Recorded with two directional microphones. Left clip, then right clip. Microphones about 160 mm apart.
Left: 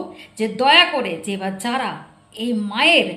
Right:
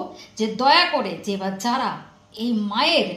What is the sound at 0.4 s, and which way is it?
A woman's voice, 20° left (ahead or behind).